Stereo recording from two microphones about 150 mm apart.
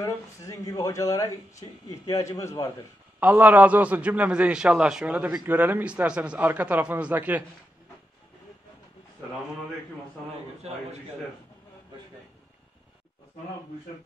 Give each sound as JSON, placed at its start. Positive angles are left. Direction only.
{"t": 0.0, "sound": "speech", "side_deg": 20}
{"t": 3.2, "sound": "a man's voice", "side_deg": -10}